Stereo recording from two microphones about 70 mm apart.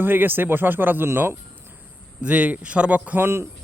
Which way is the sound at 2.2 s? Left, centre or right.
Centre.